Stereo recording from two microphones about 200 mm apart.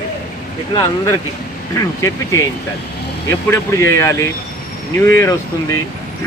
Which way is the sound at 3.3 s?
15° left (ahead or behind).